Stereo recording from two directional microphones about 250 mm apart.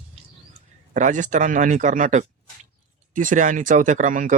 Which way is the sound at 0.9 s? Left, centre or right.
Right.